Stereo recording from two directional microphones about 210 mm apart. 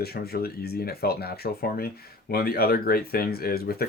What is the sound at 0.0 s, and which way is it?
Speech, 50° left (ahead or behind).